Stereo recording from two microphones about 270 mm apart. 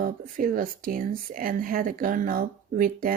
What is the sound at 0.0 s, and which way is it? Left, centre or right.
Speech, right.